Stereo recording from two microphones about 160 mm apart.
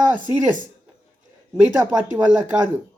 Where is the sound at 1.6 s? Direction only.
10° right (ahead or behind).